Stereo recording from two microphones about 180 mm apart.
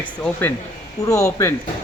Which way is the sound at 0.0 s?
10° left (ahead or behind).